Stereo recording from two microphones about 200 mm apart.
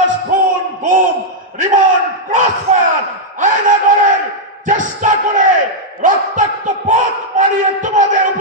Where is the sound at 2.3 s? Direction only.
40° right (ahead or behind).